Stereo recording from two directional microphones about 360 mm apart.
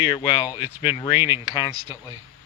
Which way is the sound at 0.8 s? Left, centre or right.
Centre.